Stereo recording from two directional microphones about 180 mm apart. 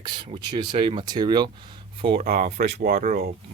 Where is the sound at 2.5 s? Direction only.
65° right (ahead or behind).